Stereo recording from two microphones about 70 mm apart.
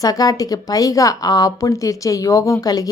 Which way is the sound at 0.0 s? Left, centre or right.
Left.